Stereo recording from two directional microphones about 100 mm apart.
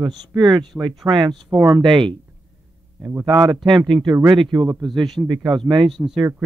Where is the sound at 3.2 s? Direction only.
45° right (ahead or behind).